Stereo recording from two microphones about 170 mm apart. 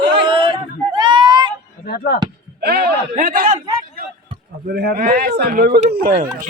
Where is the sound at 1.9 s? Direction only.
65° left (ahead or behind).